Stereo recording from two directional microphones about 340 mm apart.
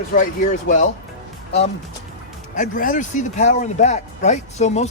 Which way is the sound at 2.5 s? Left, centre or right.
Left.